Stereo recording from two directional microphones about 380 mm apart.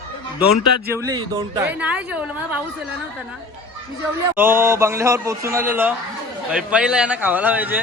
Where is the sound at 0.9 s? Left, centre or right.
Centre.